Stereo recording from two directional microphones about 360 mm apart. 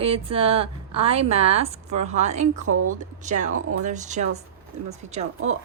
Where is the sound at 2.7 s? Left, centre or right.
Right.